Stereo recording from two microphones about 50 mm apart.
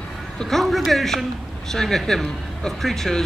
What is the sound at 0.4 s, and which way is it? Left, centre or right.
A man's voice, centre.